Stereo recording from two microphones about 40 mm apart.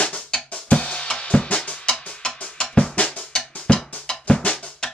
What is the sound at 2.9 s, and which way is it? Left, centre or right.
Drum, left.